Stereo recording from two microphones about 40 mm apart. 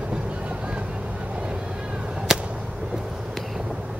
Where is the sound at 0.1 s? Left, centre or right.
Right.